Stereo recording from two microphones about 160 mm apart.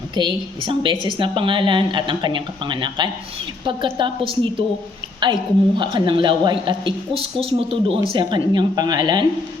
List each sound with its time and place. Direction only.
0.1 s a woman's voice: 30° right (ahead or behind)